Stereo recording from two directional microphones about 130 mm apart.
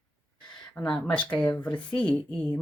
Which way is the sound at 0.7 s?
5° left (ahead or behind).